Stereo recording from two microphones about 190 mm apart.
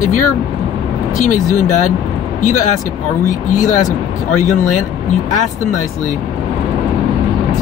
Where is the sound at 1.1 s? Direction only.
40° left (ahead or behind).